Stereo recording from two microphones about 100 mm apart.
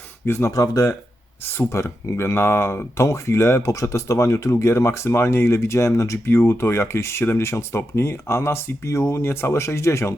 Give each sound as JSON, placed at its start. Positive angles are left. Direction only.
{"t": 0.3, "sound": "speech", "side_deg": 30}